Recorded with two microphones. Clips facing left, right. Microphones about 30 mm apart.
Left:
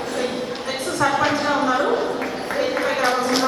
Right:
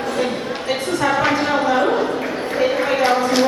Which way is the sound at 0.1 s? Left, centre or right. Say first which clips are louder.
Right 3 dB; right.